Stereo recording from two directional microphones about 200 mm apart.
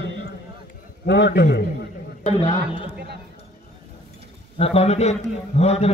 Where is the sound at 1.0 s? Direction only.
60° left (ahead or behind).